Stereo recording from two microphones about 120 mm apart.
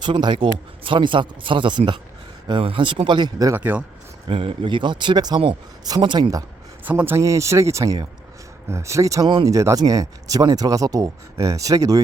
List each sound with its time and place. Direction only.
0.0 s speech: 40° right (ahead or behind)
3.5 s speech: 15° right (ahead or behind)
4.3 s speech: 45° right (ahead or behind)
6.8 s speech: 15° right (ahead or behind)